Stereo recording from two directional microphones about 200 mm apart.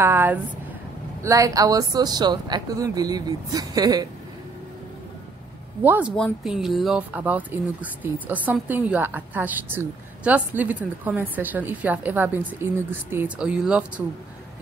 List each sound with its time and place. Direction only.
0.0 s speech: 10° right (ahead or behind)
5.9 s speech: 10° right (ahead or behind)